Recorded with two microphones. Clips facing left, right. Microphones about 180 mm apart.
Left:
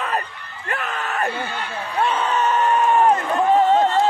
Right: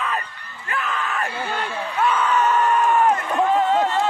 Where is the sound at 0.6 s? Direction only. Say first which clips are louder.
Even; 40° left (ahead or behind).